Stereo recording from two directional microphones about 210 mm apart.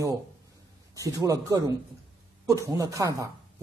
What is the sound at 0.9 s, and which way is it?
A man's voice, 15° right (ahead or behind).